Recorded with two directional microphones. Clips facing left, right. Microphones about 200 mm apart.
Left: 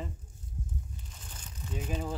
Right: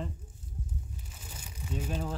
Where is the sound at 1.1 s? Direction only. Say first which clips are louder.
Right 2 dB; 10° right (ahead or behind).